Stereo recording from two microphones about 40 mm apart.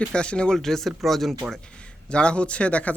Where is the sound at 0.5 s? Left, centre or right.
Centre.